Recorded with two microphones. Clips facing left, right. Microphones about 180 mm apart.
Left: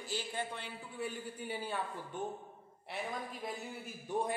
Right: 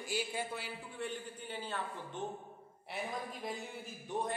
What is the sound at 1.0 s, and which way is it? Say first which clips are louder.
A man's voice: left 2 dB; 10° left (ahead or behind).